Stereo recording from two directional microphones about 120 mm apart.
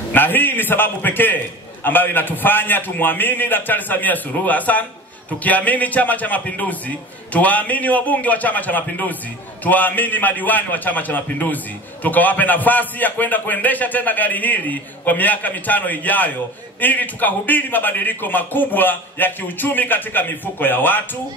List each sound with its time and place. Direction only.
0.1 s a man's voice: 15° left (ahead or behind)